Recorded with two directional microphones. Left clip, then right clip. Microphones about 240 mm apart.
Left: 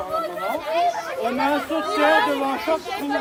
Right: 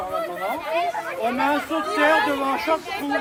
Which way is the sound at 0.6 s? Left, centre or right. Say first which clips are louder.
Left 4 dB; left.